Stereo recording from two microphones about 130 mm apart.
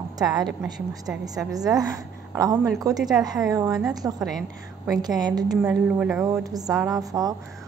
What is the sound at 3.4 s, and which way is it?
Speech, 25° right (ahead or behind).